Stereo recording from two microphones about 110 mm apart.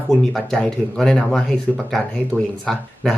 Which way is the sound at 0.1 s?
5° left (ahead or behind).